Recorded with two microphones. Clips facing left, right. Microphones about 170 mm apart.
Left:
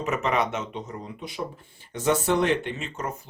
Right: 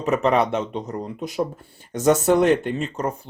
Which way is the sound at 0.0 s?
35° right (ahead or behind).